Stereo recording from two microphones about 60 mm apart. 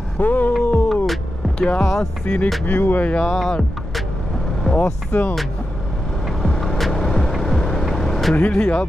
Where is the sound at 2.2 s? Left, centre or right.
Left.